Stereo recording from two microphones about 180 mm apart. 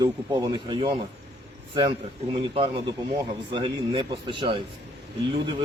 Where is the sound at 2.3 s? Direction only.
30° right (ahead or behind).